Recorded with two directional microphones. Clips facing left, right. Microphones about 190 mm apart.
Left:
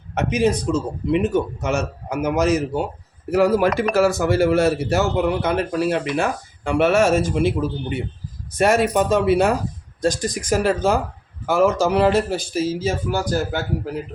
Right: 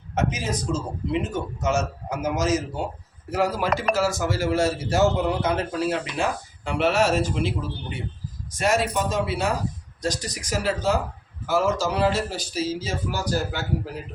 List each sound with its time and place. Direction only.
0.1 s a man's voice: 65° left (ahead or behind)